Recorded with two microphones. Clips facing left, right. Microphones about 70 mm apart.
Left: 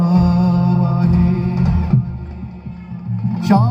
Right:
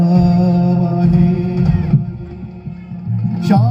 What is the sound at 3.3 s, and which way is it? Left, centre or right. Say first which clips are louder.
Music: even; left.